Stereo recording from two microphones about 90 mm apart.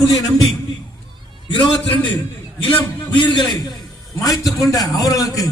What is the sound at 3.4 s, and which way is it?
A man's voice, 45° left (ahead or behind).